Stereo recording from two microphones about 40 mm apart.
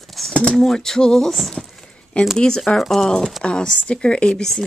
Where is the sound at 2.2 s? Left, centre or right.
Left.